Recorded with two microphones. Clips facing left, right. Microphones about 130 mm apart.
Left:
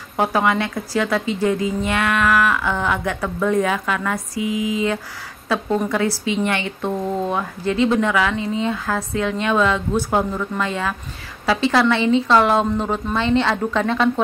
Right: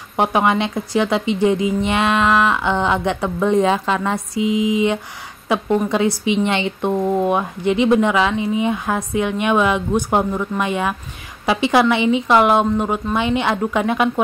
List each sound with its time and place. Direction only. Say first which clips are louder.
0.2 s a woman's voice: right 2 dB; 20° right (ahead or behind)